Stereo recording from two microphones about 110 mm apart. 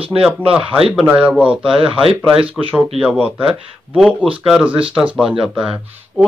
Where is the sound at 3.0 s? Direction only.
10° right (ahead or behind).